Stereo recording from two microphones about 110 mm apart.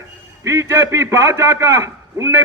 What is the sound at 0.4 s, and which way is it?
A man's voice, 25° right (ahead or behind).